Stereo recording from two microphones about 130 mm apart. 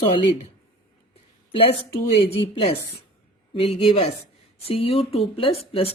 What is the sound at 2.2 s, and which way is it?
Speech, 45° left (ahead or behind).